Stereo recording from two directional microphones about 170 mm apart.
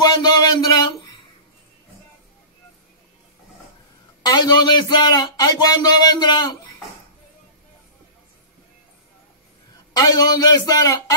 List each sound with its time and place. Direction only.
0.0 s a sound: 25° left (ahead or behind)
4.2 s speech: 25° left (ahead or behind)
9.9 s speech: 25° left (ahead or behind)